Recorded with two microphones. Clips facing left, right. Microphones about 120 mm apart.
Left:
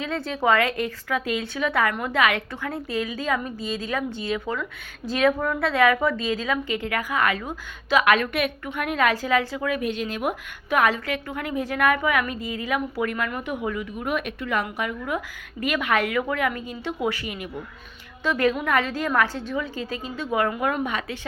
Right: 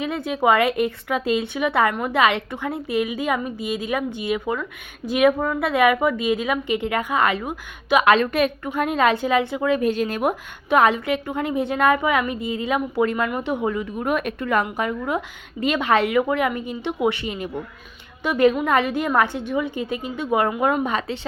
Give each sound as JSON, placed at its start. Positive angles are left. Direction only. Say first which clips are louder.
{"t": 0.0, "sound": "a woman's voice", "louder": "right 3 dB", "side_deg": -15}
{"t": 8.0, "sound": "a woman's voice", "louder": "right 4 dB", "side_deg": -30}
{"t": 10.7, "sound": "a woman's voice", "louder": "right 4 dB", "side_deg": -25}
{"t": 14.6, "sound": "a woman's voice", "louder": "right 4 dB", "side_deg": -30}
{"t": 18.2, "sound": "a woman's voice", "louder": "right 5 dB", "side_deg": -20}
{"t": 20.8, "sound": "a woman's voice", "louder": "right 4 dB", "side_deg": -35}